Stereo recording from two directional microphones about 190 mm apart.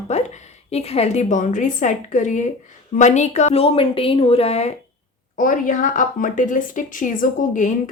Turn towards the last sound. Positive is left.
turn(degrees=40)  # may be behind; listen again after turning